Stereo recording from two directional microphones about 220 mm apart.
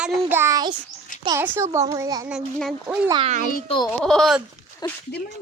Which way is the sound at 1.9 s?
15° right (ahead or behind).